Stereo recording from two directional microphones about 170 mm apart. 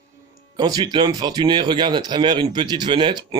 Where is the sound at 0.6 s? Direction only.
25° right (ahead or behind).